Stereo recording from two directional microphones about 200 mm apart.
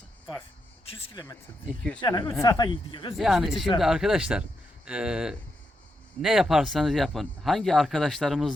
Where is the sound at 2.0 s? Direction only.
20° left (ahead or behind).